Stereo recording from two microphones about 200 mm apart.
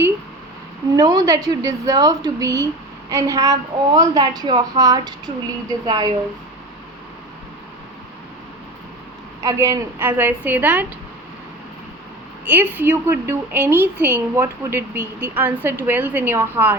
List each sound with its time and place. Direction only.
0.9 s a woman's voice: 20° right (ahead or behind)
9.4 s a woman's voice: 15° right (ahead or behind)
12.5 s a woman's voice: 10° right (ahead or behind)